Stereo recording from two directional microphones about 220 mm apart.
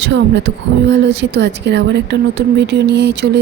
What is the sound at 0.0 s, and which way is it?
A woman's voice, 55° right (ahead or behind).